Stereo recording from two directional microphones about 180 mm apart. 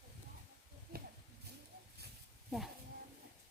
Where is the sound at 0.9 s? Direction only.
55° right (ahead or behind).